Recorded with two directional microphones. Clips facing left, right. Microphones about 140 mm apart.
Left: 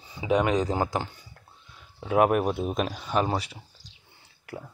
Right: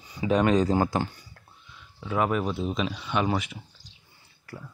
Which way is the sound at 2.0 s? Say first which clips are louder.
Left 4 dB; 55° left (ahead or behind).